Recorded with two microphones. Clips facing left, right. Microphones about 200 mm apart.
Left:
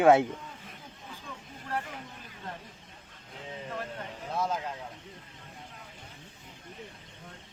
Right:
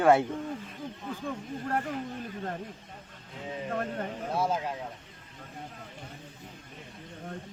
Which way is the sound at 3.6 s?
55° right (ahead or behind).